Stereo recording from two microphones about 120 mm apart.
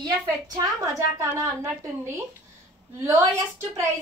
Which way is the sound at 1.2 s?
25° right (ahead or behind).